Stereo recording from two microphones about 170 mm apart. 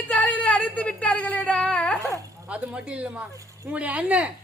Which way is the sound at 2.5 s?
5° right (ahead or behind).